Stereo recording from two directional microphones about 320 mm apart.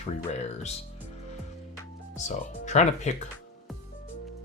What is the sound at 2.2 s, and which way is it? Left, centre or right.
Speech, left.